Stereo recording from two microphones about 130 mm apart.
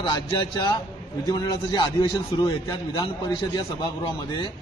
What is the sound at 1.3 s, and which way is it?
A man's voice, 30° left (ahead or behind).